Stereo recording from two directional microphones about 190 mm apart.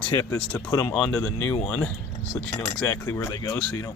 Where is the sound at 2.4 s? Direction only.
5° left (ahead or behind).